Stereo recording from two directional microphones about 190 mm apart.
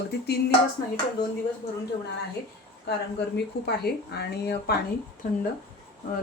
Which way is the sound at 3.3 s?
60° left (ahead or behind).